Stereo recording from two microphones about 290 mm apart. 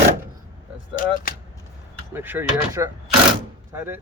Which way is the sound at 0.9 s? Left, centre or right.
Left.